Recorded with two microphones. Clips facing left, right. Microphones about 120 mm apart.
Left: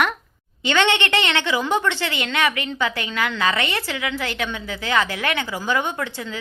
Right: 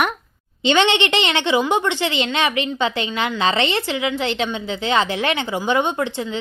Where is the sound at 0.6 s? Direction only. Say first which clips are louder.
Right 3 dB; 20° right (ahead or behind).